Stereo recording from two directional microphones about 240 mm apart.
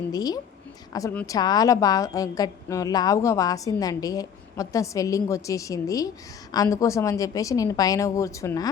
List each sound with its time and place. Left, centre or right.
0.1 s a woman's voice: centre